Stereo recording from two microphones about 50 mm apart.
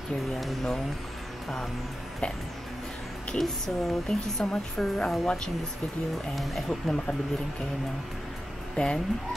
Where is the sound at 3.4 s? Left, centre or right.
Centre.